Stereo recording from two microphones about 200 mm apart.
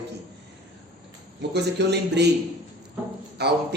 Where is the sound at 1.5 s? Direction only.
60° right (ahead or behind).